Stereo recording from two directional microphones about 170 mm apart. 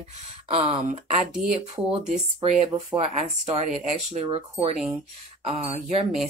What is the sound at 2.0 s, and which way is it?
Speech, 40° right (ahead or behind).